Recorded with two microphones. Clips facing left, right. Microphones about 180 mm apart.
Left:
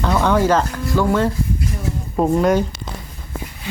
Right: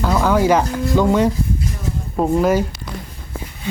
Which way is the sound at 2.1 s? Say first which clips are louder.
Even; centre (ahead or behind).